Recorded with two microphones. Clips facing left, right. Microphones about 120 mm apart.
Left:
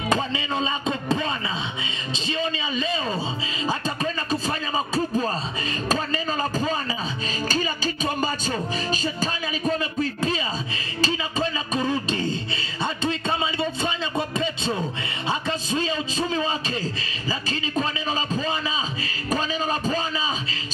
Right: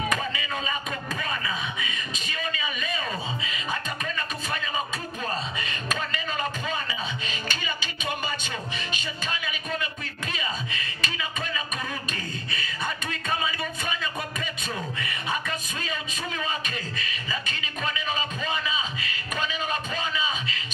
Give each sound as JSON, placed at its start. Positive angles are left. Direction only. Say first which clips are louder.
{"t": 0.1, "sound": "speech", "louder": "left 5 dB", "side_deg": 25}
{"t": 11.0, "sound": "a sound", "louder": "left 10 dB", "side_deg": 30}
{"t": 15.2, "sound": "speech", "louder": "left 6 dB", "side_deg": 30}